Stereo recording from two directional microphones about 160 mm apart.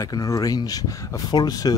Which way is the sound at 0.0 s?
20° left (ahead or behind).